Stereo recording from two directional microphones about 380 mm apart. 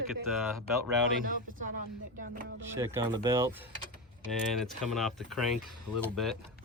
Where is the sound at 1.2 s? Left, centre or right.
Right.